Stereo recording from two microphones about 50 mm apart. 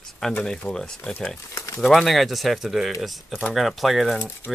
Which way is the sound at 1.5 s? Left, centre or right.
Left.